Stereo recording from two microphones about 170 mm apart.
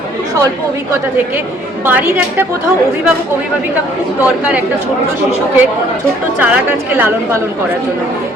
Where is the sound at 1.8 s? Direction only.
10° right (ahead or behind).